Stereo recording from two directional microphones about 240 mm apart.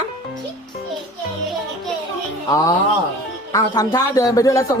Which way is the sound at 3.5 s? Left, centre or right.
Centre.